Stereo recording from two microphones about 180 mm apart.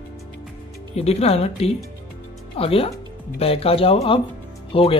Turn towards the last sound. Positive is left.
turn(degrees=30)  # may be behind; listen again after turning